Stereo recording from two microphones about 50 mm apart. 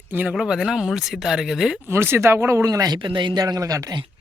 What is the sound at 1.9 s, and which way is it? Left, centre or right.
Speech, right.